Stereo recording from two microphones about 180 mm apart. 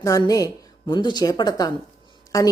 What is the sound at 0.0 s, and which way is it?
A woman's voice, 20° left (ahead or behind).